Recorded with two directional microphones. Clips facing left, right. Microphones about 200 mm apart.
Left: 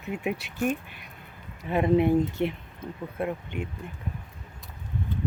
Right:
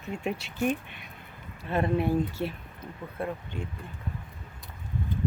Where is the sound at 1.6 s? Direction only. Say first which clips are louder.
Left 4 dB; 15° left (ahead or behind).